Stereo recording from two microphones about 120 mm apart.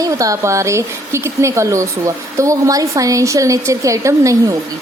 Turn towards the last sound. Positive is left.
turn(degrees=-25)  # may be behind; listen again after turning